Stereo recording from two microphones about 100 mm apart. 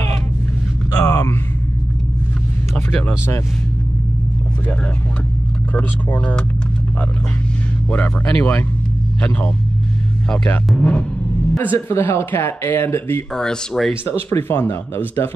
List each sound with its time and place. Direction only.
0.9 s a sound: 35° left (ahead or behind)
2.7 s speech: 20° left (ahead or behind)
5.8 s speech: 20° left (ahead or behind)
7.9 s speech: 15° left (ahead or behind)
10.3 s speech: 15° left (ahead or behind)
11.7 s speech: 25° left (ahead or behind)
13.3 s speech: 5° left (ahead or behind)
14.0 s speech: 25° left (ahead or behind)